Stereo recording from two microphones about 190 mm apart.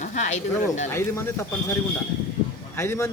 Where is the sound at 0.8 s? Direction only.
15° left (ahead or behind).